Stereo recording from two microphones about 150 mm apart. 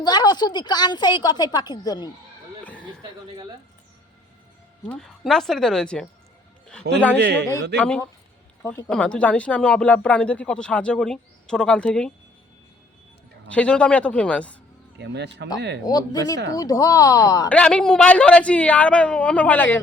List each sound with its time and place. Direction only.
0.0 s a woman's voice: 30° left (ahead or behind)
4.9 s speech: centre (ahead or behind)
7.8 s speech: 10° left (ahead or behind)
8.6 s a woman's voice: 25° left (ahead or behind)
8.9 s speech: 5° left (ahead or behind)
13.5 s speech: 10° left (ahead or behind)
15.4 s a woman's voice: 25° left (ahead or behind)
17.5 s speech: 5° left (ahead or behind)